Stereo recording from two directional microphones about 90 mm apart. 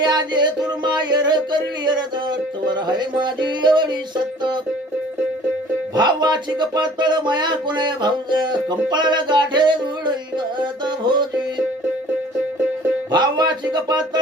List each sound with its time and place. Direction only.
0.0 s music: 55° right (ahead or behind)
6.0 s music: 55° right (ahead or behind)
13.1 s music: 55° right (ahead or behind)